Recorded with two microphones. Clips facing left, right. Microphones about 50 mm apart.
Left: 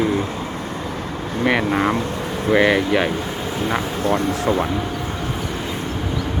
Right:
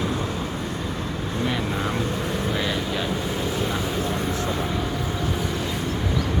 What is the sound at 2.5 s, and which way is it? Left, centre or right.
Speech, left.